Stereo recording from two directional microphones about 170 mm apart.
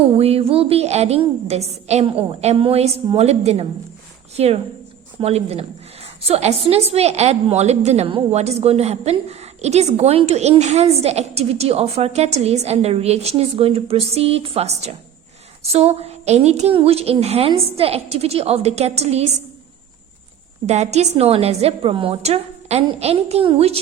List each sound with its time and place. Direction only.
0.2 s a woman's voice: 35° right (ahead or behind)
20.7 s a woman's voice: 40° right (ahead or behind)